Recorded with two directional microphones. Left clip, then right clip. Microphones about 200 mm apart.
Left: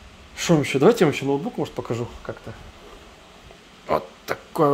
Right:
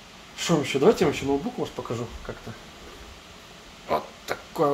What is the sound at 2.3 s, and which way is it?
Speech, 45° left (ahead or behind).